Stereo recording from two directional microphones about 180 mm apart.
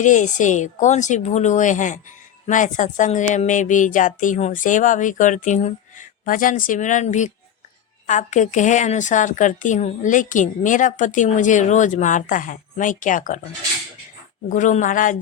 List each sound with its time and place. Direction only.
0.0 s a woman's voice: 45° left (ahead or behind)
14.5 s a woman's voice: 45° left (ahead or behind)